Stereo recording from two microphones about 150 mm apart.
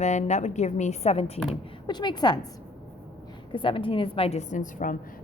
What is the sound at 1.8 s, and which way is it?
Speech, 30° left (ahead or behind).